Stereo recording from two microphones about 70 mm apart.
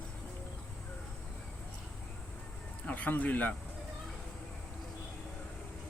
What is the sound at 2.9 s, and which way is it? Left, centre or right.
Speech, left.